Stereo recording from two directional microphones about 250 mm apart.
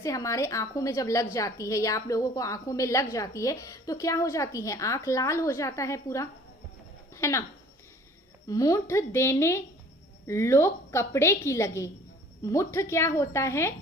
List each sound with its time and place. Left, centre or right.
0.0 s speech: centre
8.4 s speech: centre